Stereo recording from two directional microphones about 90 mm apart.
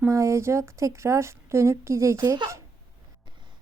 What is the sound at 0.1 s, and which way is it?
Speech, 35° right (ahead or behind).